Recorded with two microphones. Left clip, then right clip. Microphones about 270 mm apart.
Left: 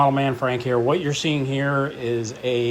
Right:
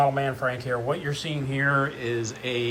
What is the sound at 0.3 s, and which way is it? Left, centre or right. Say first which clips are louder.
Speech: left 5 dB; right.